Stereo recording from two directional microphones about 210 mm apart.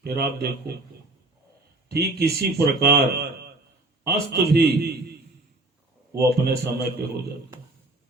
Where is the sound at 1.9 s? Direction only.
50° right (ahead or behind).